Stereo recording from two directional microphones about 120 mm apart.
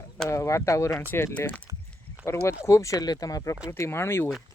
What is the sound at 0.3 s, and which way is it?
Speech, 25° left (ahead or behind).